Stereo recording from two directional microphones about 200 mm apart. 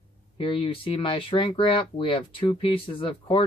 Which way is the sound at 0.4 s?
25° left (ahead or behind).